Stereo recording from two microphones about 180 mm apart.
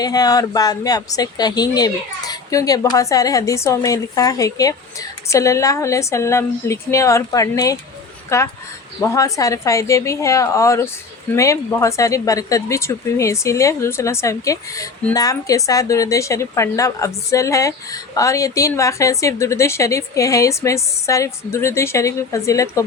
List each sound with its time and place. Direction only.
0.0 s a woman's voice: 20° left (ahead or behind)